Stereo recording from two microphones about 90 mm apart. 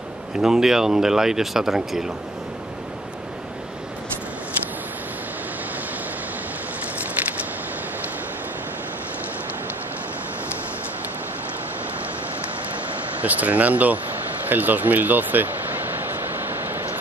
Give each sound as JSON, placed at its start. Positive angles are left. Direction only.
{"t": 0.4, "sound": "speech", "side_deg": -5}
{"t": 13.2, "sound": "speech", "side_deg": -15}